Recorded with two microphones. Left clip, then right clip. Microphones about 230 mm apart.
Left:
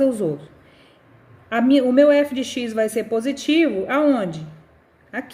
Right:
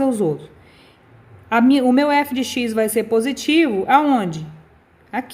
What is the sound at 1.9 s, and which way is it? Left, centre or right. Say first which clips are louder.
A woman's voice: left 2 dB; right.